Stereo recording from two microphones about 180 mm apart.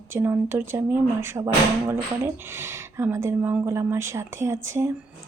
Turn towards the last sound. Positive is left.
turn(degrees=-15)  # may be behind; listen again after turning